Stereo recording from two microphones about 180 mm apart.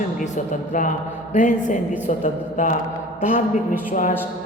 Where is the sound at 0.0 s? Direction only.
45° left (ahead or behind).